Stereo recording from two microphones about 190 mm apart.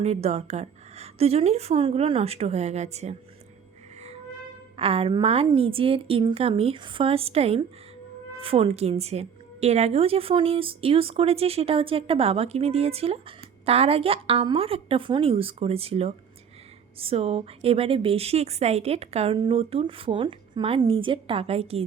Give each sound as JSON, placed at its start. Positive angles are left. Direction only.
{"t": 0.0, "sound": "a woman's voice", "side_deg": -35}
{"t": 4.8, "sound": "a woman's voice", "side_deg": -30}